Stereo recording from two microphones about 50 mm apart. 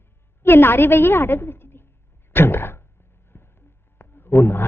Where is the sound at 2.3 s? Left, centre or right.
Left.